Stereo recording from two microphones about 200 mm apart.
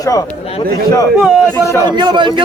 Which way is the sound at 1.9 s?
20° right (ahead or behind).